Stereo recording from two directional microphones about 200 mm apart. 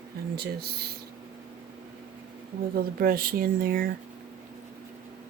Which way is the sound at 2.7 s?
45° right (ahead or behind).